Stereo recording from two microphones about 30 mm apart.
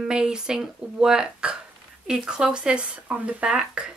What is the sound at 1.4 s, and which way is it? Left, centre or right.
Hiccup, right.